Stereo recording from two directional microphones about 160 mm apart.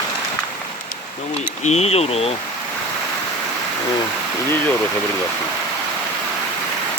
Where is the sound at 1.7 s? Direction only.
40° left (ahead or behind).